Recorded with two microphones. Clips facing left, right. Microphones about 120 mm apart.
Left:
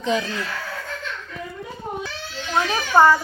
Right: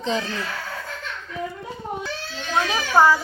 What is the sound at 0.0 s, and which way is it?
Speech, 30° right (ahead or behind).